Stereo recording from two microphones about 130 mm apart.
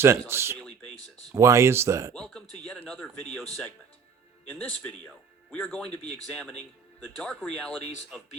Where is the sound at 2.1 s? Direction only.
5° left (ahead or behind).